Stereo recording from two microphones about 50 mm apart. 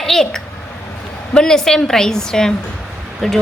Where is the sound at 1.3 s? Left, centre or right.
Centre.